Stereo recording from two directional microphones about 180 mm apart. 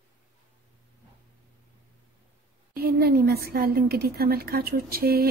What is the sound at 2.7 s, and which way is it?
A woman's voice, 60° right (ahead or behind).